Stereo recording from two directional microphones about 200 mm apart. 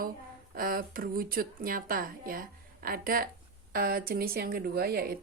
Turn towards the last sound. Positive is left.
turn(degrees=-50)  # may be behind; listen again after turning